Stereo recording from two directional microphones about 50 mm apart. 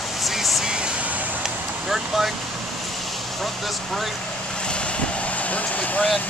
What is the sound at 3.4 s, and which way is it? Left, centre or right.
Speech, centre.